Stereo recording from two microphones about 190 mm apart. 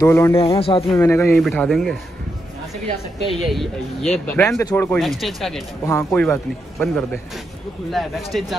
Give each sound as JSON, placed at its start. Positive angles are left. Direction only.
{"t": 0.0, "sound": "speech", "side_deg": 15}
{"t": 0.4, "sound": "a man's voice", "side_deg": 30}
{"t": 0.9, "sound": "speech", "side_deg": 15}
{"t": 1.3, "sound": "speech", "side_deg": 0}
{"t": 3.3, "sound": "speech", "side_deg": 0}
{"t": 4.6, "sound": "speech", "side_deg": 15}
{"t": 4.9, "sound": "speech", "side_deg": 0}
{"t": 5.9, "sound": "speech", "side_deg": 15}